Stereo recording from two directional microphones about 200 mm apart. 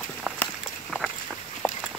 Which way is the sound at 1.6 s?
10° left (ahead or behind).